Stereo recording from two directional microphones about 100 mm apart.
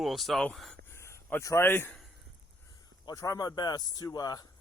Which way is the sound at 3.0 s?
35° left (ahead or behind).